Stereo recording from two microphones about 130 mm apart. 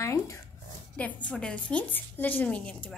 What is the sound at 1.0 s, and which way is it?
A woman's voice, 10° left (ahead or behind).